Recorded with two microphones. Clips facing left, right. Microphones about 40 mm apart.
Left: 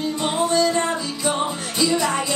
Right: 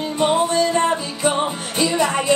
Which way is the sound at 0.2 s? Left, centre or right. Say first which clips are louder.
Right 3 dB; right.